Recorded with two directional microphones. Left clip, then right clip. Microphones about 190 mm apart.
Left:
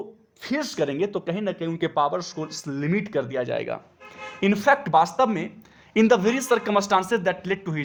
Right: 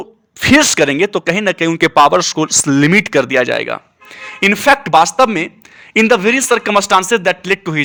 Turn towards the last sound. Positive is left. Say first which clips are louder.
# right 12 dB
turn(degrees=-20)  # may be behind; listen again after turning